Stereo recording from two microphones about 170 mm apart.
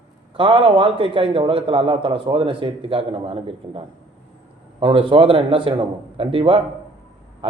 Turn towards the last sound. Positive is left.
turn(degrees=-30)  # may be behind; listen again after turning